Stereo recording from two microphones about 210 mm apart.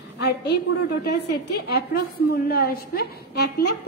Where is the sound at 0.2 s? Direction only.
55° left (ahead or behind).